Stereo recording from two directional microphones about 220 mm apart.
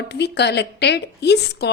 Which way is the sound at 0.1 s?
50° left (ahead or behind).